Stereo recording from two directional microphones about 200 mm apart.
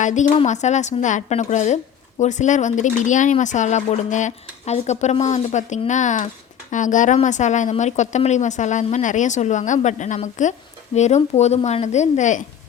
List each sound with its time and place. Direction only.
0.0 s a woman's voice: 35° left (ahead or behind)